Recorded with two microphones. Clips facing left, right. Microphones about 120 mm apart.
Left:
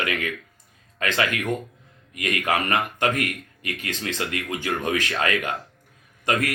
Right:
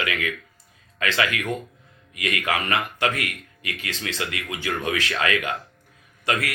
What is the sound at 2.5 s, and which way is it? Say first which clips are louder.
Speech: left 2 dB; 40° left (ahead or behind).